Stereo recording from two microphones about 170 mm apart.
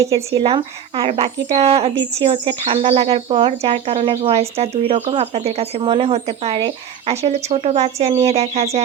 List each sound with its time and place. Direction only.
0.3 s speech: 30° right (ahead or behind)